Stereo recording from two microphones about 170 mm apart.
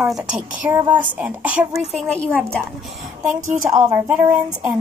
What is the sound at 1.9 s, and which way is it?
A woman's voice, 5° left (ahead or behind).